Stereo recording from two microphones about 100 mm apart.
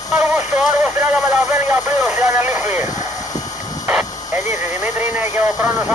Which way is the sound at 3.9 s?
20° right (ahead or behind).